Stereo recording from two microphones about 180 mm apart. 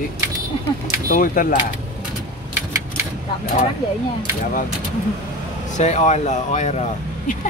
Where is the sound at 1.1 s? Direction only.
50° left (ahead or behind).